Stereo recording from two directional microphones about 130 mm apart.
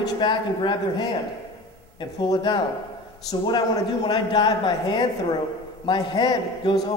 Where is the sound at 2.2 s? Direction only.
35° left (ahead or behind).